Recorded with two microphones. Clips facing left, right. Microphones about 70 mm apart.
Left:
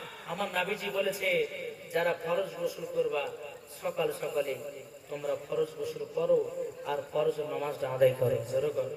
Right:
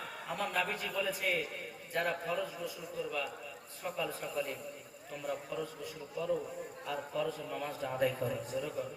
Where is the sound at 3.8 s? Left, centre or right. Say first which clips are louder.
Left 6 dB; left.